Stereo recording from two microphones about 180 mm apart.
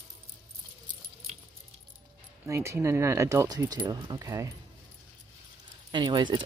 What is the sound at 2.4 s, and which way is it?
Speech, 15° right (ahead or behind).